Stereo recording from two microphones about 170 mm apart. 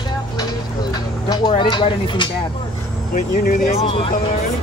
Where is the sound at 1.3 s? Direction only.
25° left (ahead or behind).